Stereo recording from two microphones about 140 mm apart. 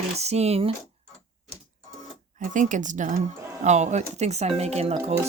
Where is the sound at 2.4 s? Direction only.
65° right (ahead or behind); by 5.0 s 45° right (ahead or behind).